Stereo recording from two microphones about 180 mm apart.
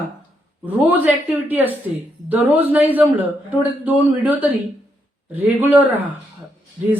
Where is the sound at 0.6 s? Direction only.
10° right (ahead or behind).